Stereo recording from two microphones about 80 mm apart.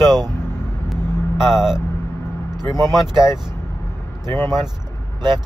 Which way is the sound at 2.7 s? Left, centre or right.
Right.